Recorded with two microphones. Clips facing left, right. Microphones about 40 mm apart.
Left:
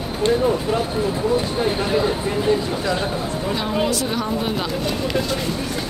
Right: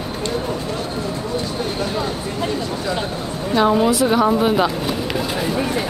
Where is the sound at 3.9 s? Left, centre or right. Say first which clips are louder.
Right 7 dB; centre.